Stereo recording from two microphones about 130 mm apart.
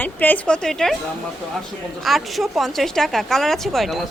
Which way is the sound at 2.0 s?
Centre (ahead or behind).